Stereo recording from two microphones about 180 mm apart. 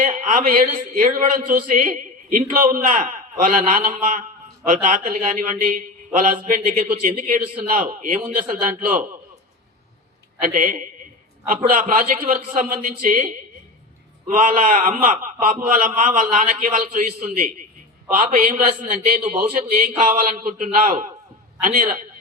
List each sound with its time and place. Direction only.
0.0 s a man's voice: 45° right (ahead or behind)
10.4 s a man's voice: 50° right (ahead or behind)